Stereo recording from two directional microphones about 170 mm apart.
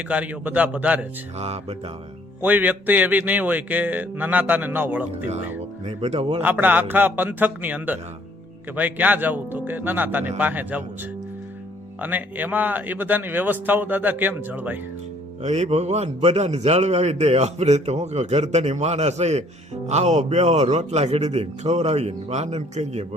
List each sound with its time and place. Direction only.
0.1 s speech: 10° right (ahead or behind)
2.4 s speech: 10° right (ahead or behind)
5.8 s a man's voice: 40° right (ahead or behind)
6.4 s speech: 10° right (ahead or behind)
11.9 s speech: 10° right (ahead or behind)
15.4 s a man's voice: 40° right (ahead or behind)